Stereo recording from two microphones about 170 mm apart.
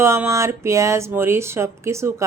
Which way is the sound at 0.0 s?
15° right (ahead or behind).